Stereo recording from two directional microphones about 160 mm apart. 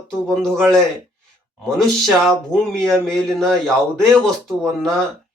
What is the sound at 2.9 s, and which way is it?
A man's voice, centre (ahead or behind).